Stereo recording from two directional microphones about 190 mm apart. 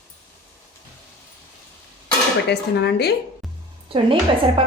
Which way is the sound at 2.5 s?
60° left (ahead or behind).